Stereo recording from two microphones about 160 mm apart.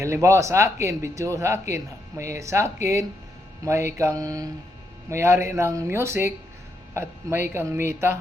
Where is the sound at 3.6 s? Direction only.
15° right (ahead or behind).